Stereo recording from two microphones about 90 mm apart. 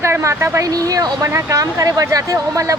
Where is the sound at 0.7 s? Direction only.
45° right (ahead or behind).